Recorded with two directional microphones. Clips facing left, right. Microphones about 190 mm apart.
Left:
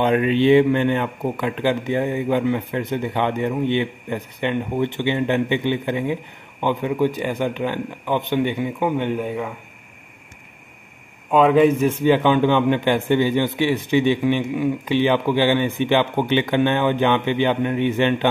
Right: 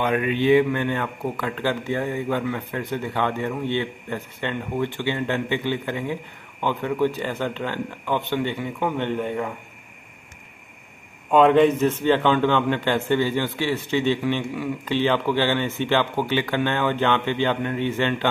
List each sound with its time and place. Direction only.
0.0 s a man's voice: 30° left (ahead or behind); by 9.5 s 5° left (ahead or behind)
11.2 s a man's voice: 5° left (ahead or behind)